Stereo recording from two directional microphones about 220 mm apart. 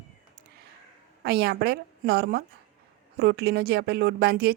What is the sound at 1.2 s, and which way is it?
A woman's voice, 45° right (ahead or behind).